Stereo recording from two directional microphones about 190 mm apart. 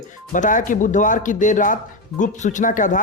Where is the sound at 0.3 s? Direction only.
40° left (ahead or behind).